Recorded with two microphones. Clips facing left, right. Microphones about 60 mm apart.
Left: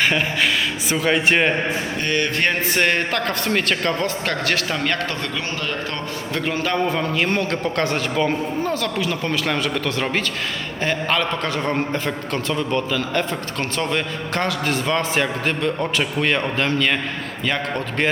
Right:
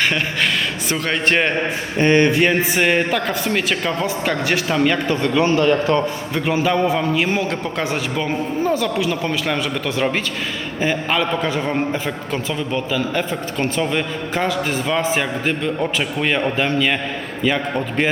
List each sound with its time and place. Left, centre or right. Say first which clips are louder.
0.9 s a man's voice: left 2 dB; centre
2.0 s speech: right 11 dB; right
2.3 s a man's voice: right 4 dB; centre
5.2 s a man's voice: right 10 dB; right; by 18.1 s centre